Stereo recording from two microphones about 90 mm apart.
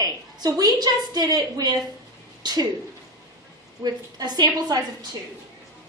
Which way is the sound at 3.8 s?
50° right (ahead or behind).